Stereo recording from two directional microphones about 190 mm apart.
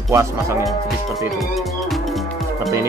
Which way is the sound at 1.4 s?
Centre (ahead or behind).